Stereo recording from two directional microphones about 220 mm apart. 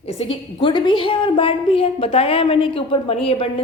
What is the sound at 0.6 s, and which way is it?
A woman's voice, 20° left (ahead or behind).